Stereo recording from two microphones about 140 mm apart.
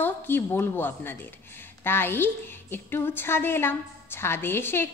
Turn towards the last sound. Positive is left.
turn(degrees=15)  # may be behind; listen again after turning